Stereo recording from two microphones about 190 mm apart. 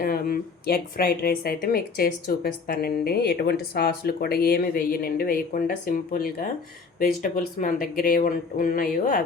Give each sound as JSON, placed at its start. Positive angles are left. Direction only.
{"t": 0.0, "sound": "speech", "side_deg": 50}